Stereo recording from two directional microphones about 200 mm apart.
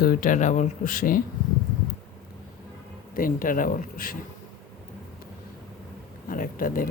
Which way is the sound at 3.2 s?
45° left (ahead or behind).